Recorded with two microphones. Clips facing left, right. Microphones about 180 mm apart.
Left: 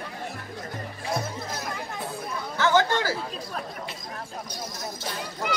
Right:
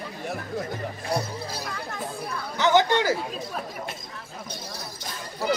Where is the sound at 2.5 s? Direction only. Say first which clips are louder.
Right 2 dB; 15° right (ahead or behind).